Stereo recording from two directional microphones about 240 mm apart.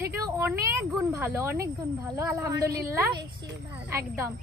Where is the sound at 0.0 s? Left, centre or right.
Centre.